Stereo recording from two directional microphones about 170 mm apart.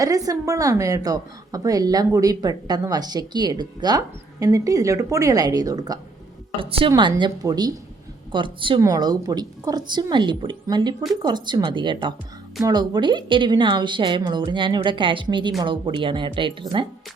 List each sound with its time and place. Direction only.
0.0 s a woman's voice: 20° right (ahead or behind)